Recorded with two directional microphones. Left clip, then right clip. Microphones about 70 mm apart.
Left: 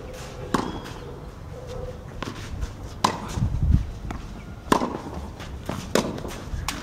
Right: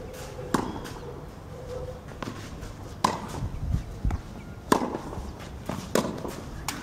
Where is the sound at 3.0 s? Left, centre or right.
Centre.